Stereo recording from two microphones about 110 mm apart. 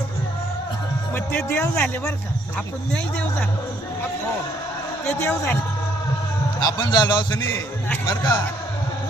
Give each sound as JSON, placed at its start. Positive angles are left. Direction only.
{"t": 1.4, "sound": "speech", "side_deg": 10}
{"t": 5.2, "sound": "a woman's voice", "side_deg": 20}
{"t": 6.6, "sound": "a man's voice", "side_deg": 40}